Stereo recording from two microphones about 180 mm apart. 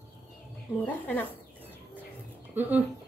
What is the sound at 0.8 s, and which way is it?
Speech, 10° left (ahead or behind).